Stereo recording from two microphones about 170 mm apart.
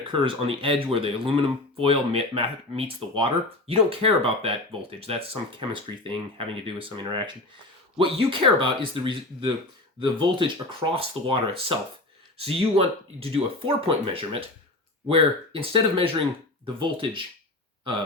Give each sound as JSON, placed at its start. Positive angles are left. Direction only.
{"t": 0.0, "sound": "speech", "side_deg": -30}